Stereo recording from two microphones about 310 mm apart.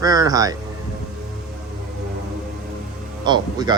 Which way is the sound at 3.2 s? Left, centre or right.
Centre.